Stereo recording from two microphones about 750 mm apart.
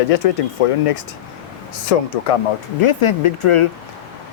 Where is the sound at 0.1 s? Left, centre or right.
Left.